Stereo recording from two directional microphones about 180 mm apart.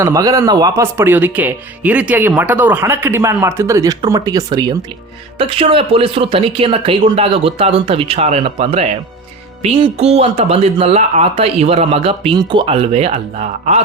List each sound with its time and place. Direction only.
0.0 s speech: 20° right (ahead or behind); by 13.8 s 35° right (ahead or behind)